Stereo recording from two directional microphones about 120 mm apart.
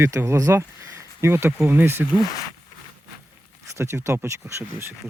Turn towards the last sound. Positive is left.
turn(degrees=-20)  # may be behind; listen again after turning